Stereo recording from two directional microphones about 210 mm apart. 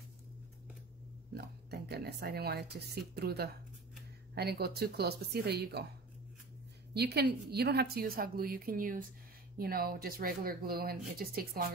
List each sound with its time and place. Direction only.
1.3 s speech: 50° right (ahead or behind)
6.9 s a woman's voice: 50° right (ahead or behind)